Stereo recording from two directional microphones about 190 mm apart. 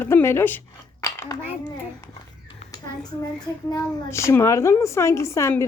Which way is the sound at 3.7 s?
15° left (ahead or behind).